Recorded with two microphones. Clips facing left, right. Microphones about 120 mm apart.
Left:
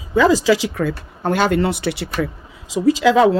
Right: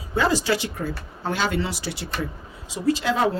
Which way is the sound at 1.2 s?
50° left (ahead or behind).